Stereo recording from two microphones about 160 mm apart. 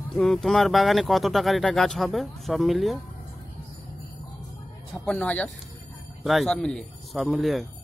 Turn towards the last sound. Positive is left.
turn(degrees=0)  # may be behind; listen again after turning